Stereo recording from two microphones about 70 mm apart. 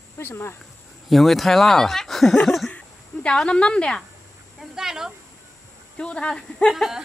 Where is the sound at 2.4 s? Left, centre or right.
Centre.